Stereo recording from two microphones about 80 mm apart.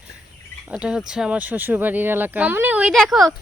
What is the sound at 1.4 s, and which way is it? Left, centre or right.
Speech, right.